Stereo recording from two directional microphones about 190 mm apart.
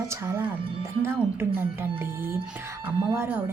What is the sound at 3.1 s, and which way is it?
Speech, 10° right (ahead or behind).